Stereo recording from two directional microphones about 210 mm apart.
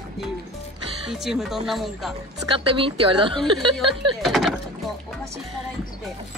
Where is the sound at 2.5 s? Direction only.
25° right (ahead or behind).